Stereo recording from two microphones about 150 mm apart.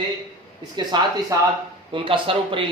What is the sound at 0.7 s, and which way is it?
A man's voice, 30° right (ahead or behind).